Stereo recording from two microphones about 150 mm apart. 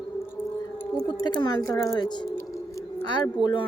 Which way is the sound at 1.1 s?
30° left (ahead or behind).